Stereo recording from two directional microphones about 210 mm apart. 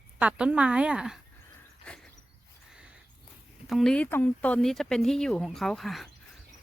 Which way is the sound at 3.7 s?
5° left (ahead or behind).